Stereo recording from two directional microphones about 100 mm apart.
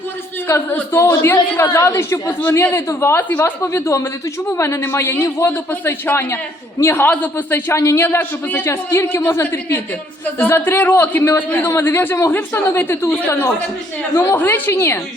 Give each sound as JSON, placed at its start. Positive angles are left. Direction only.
{"t": 0.4, "sound": "a man's voice", "side_deg": 25}